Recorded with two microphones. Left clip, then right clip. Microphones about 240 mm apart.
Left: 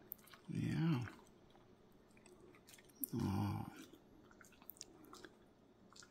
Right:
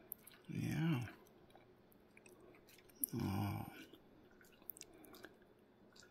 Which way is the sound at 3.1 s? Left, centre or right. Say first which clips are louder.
Left 1 dB; centre.